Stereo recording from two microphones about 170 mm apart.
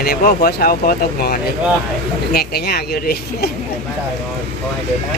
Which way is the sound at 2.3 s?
65° left (ahead or behind).